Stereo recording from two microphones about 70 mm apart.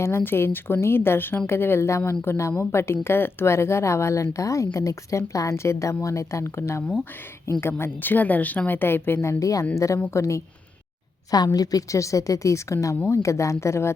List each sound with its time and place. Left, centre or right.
0.2 s a woman's voice: left
9.4 s speech: left
11.3 s speech: left